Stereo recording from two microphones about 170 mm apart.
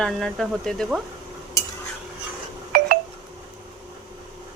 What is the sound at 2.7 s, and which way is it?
Telephone dialing, 60° right (ahead or behind).